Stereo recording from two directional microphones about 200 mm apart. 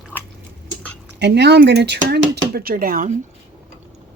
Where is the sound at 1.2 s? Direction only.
55° right (ahead or behind).